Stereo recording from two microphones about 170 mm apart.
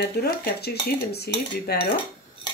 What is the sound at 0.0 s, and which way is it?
Cutlery, 70° left (ahead or behind).